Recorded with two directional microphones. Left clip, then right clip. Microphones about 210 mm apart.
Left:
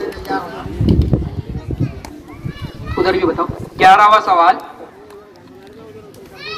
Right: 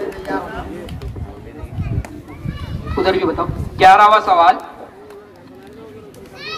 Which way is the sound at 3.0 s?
55° right (ahead or behind).